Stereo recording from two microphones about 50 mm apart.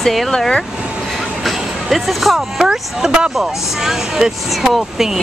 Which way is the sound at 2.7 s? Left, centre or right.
Centre.